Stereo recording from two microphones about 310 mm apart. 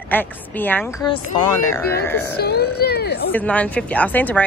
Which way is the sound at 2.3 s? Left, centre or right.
Left.